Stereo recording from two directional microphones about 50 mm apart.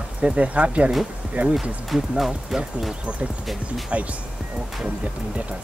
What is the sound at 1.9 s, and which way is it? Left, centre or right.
Speech, centre.